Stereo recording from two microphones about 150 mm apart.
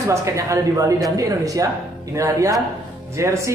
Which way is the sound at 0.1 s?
20° right (ahead or behind).